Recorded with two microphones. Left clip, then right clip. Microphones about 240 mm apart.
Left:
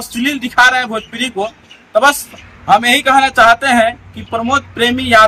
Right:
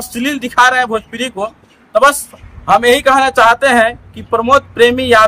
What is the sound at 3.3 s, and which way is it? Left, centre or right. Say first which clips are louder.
Speech: even; centre.